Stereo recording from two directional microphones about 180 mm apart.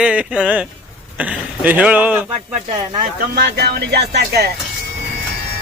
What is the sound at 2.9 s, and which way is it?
Speech, 60° right (ahead or behind).